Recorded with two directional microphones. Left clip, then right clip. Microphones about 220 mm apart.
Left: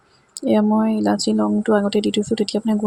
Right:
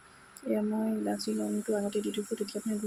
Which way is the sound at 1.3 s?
40° left (ahead or behind).